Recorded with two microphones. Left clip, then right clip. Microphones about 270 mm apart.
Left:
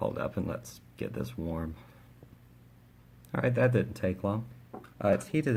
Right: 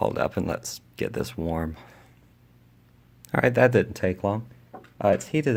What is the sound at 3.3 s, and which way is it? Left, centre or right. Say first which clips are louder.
Speech: right 8 dB; right.